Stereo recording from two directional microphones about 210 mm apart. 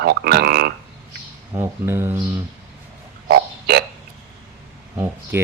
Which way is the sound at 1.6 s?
10° right (ahead or behind).